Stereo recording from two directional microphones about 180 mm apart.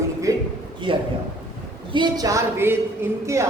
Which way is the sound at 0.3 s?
20° right (ahead or behind).